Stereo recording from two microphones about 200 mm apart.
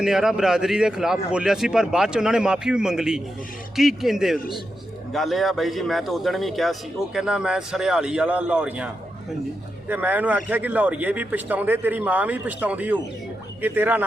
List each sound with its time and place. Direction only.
0.0 s a man's voice: centre (ahead or behind)
9.9 s a man's voice: 10° right (ahead or behind)